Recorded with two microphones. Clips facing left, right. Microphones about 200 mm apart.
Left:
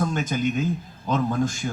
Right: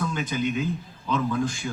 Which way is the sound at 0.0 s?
45° left (ahead or behind).